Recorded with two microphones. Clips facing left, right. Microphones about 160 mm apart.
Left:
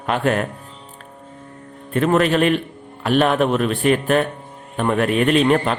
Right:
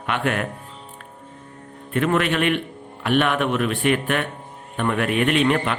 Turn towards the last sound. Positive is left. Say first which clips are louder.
# left 4 dB
turn(degrees=40)  # may be behind; listen again after turning